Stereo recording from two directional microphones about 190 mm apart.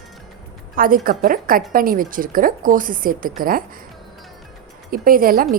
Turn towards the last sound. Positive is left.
turn(degrees=-50)  # may be behind; listen again after turning